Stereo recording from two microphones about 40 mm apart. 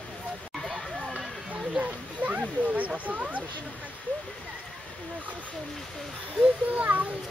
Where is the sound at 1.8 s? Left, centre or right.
Right.